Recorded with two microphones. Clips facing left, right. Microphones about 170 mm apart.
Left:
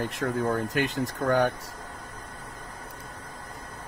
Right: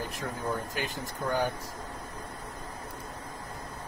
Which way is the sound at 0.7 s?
70° left (ahead or behind).